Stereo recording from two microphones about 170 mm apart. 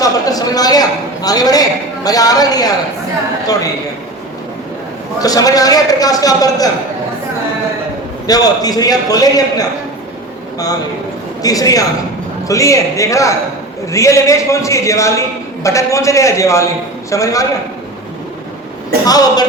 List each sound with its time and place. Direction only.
0.0 s a sound: 20° left (ahead or behind)
2.0 s a man's voice: 20° left (ahead or behind)
5.2 s a man's voice: 20° left (ahead or behind)
8.3 s a man's voice: 20° left (ahead or behind)
11.4 s a man's voice: 20° left (ahead or behind)
19.0 s a man's voice: 20° left (ahead or behind)